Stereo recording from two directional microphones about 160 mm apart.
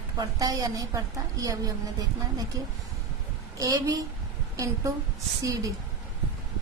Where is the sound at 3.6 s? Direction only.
20° right (ahead or behind).